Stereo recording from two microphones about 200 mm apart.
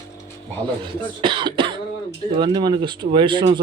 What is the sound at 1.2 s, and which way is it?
Speech, 25° right (ahead or behind).